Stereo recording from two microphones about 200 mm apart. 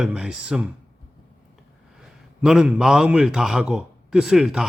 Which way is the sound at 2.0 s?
5° right (ahead or behind).